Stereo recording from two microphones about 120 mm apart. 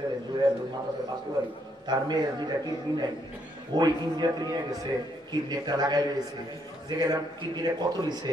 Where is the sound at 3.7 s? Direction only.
35° right (ahead or behind).